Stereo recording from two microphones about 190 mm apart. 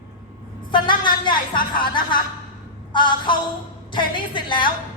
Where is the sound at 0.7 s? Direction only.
25° left (ahead or behind).